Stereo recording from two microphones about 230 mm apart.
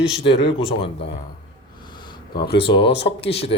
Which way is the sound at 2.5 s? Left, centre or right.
Left.